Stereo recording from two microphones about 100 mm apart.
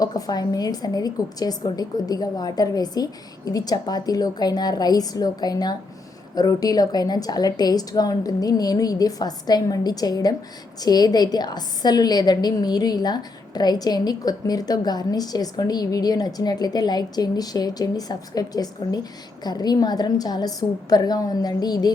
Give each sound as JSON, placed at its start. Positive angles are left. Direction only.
{"t": 0.0, "sound": "a woman's voice", "side_deg": 40}